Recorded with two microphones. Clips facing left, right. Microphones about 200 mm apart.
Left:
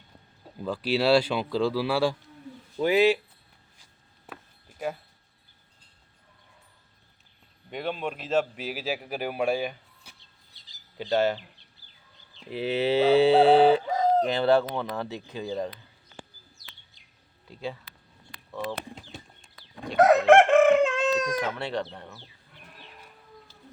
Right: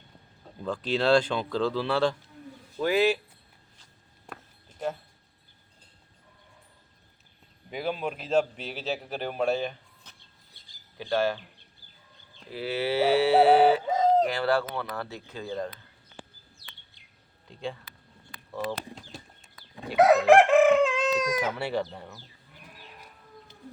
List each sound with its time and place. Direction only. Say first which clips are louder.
0.6 s a man's voice: left 2 dB; 5° left (ahead or behind)
4.3 s a sound: even; 5° left (ahead or behind)
7.7 s a man's voice: even; 5° right (ahead or behind)
10.2 s a sound: right 2 dB; 55° right (ahead or behind)
10.9 s a man's voice: left 2 dB; 20° left (ahead or behind)
12.5 s speech: left 4 dB; 20° left (ahead or behind)
13.3 s music: right 2 dB; 10° right (ahead or behind)
13.8 s chicken: right 1 dB; 20° right (ahead or behind)
14.3 s a man's voice: left 4 dB; 25° left (ahead or behind)
17.5 s speech: even; 5° left (ahead or behind)
18.7 s a sound: even; 5° left (ahead or behind)
19.9 s speech: left 1 dB; 5° right (ahead or behind)